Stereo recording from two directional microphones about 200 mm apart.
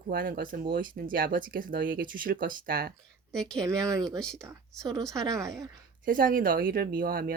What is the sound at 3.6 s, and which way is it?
Speech, 15° right (ahead or behind).